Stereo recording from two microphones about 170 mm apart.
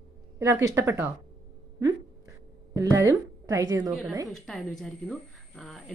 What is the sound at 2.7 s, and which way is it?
A woman's voice, 20° right (ahead or behind).